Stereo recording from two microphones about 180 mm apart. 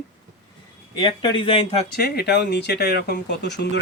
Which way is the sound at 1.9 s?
60° left (ahead or behind).